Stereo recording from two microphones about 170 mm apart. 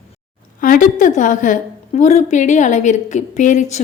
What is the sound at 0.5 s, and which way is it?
A woman's voice, 55° left (ahead or behind).